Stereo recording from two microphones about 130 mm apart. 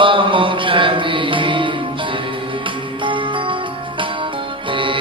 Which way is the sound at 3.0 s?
40° right (ahead or behind).